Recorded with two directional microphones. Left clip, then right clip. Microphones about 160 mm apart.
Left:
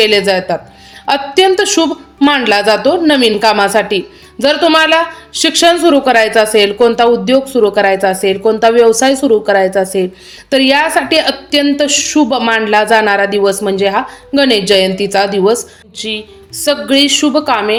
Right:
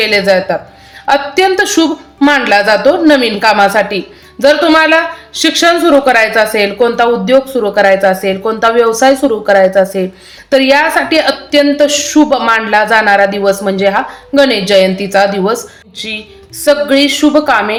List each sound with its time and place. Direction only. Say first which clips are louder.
0.0 s speech: right 1 dB; 45° left (ahead or behind)